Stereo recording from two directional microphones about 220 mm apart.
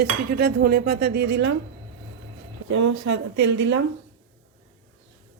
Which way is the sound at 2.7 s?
60° right (ahead or behind).